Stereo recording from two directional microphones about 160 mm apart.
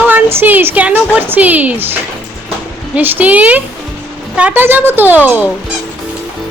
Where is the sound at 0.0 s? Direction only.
10° right (ahead or behind).